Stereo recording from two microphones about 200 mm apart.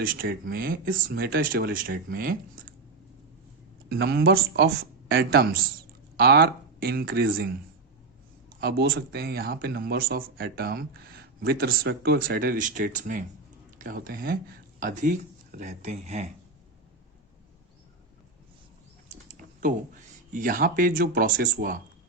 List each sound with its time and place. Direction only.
0.0 s speech: 45° right (ahead or behind)
3.8 s speech: 55° right (ahead or behind); by 16.3 s 35° right (ahead or behind)
19.0 s a sound: 35° right (ahead or behind)
20.3 s speech: 45° right (ahead or behind)